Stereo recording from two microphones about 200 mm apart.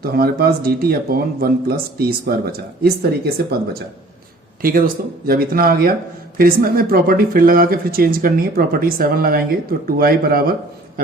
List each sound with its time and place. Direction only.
0.0 s speech: 50° right (ahead or behind)
4.6 s speech: 45° right (ahead or behind)